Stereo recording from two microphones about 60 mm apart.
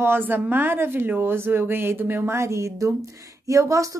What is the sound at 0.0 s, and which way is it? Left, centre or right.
A woman's voice, right.